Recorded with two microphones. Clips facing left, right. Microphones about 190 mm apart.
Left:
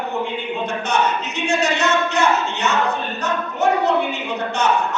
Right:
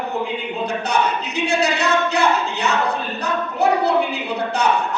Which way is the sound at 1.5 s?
35° right (ahead or behind).